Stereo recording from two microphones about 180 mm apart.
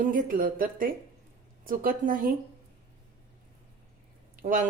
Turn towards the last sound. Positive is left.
turn(degrees=-50)  # may be behind; listen again after turning